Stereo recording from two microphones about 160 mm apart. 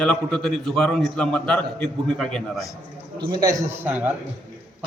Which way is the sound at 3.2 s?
25° right (ahead or behind).